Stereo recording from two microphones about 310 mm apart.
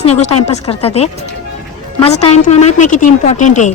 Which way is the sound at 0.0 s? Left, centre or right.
Centre.